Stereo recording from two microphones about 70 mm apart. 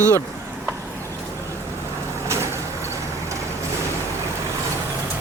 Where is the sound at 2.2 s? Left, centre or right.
Right.